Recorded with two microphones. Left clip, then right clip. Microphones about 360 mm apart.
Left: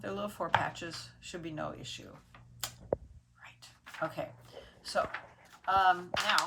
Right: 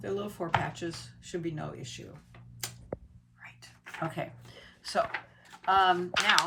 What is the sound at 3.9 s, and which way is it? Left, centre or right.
Speech, centre.